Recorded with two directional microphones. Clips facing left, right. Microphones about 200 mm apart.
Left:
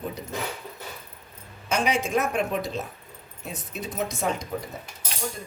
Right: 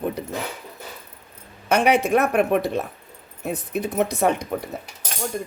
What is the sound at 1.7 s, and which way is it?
Speech, 60° right (ahead or behind).